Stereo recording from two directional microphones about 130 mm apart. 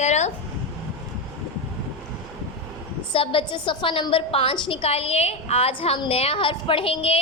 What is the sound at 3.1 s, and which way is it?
A woman's voice, 40° left (ahead or behind).